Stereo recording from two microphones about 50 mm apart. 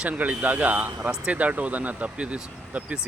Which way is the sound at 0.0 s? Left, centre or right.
Right.